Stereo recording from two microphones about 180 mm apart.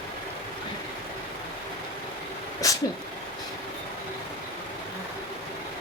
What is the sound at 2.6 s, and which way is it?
Speech, 20° left (ahead or behind).